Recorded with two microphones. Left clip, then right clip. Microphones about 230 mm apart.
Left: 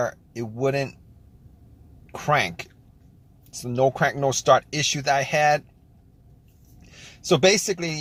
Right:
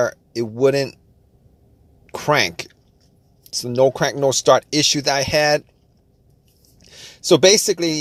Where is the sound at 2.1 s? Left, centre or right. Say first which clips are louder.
Right 4 dB; right.